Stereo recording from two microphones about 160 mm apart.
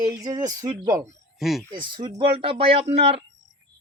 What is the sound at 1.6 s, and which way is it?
Speech, 30° right (ahead or behind).